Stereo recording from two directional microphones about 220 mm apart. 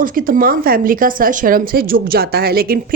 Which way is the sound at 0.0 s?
40° right (ahead or behind).